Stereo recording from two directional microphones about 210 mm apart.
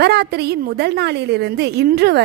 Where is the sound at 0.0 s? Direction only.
50° right (ahead or behind).